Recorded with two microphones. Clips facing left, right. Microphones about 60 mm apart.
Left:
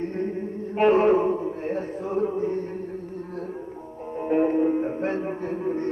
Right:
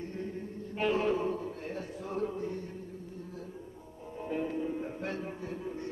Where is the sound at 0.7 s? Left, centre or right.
Left.